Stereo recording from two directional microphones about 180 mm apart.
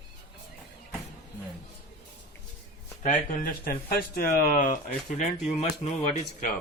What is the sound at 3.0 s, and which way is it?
Speech, 45° left (ahead or behind).